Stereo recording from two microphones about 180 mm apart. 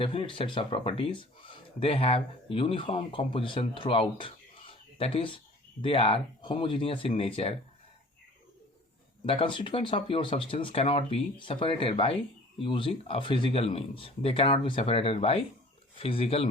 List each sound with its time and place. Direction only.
0.0 s speech: 30° left (ahead or behind)
9.2 s speech: 30° left (ahead or behind)